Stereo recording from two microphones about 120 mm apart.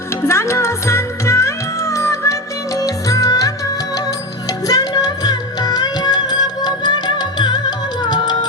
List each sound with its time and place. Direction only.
0.3 s music: 25° left (ahead or behind)